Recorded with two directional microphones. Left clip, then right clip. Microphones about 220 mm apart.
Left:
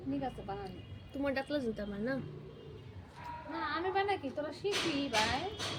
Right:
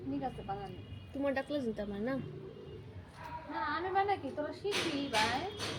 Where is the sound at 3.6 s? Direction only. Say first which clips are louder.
Right 1 dB; 50° left (ahead or behind).